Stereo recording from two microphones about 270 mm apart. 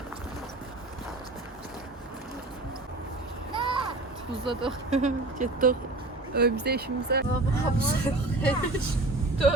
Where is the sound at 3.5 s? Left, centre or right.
Centre.